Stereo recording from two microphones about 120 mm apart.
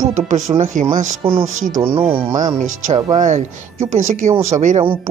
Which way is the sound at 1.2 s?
45° right (ahead or behind).